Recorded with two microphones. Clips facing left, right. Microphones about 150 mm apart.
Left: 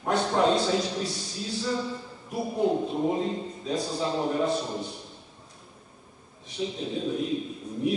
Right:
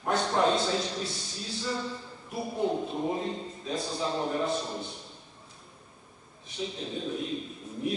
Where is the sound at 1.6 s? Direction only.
5° left (ahead or behind).